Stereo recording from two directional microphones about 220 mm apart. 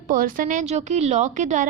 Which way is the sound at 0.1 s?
40° right (ahead or behind).